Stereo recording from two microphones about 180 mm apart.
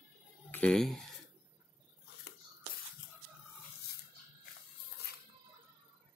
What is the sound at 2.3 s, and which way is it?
Shuffle, 60° left (ahead or behind).